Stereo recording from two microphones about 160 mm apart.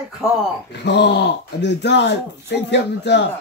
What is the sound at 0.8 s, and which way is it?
Speech, 90° left.